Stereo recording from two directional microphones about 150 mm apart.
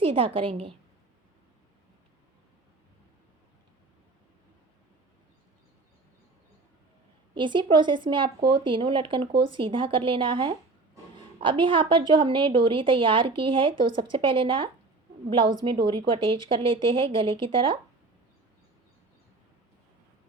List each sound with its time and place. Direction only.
0.0 s a woman's voice: 40° right (ahead or behind)
7.3 s a woman's voice: 30° right (ahead or behind)